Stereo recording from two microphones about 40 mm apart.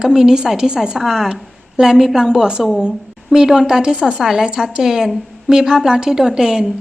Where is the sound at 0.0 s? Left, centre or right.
Centre.